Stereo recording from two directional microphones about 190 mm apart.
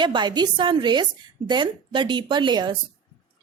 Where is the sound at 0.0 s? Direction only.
25° right (ahead or behind).